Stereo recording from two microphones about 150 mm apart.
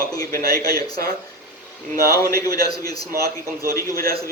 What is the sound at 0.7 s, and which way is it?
A man's voice, 90° right.